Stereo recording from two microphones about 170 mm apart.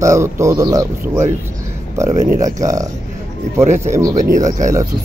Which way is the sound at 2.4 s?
20° right (ahead or behind).